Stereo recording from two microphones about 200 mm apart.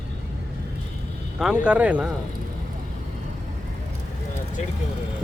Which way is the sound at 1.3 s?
5° right (ahead or behind).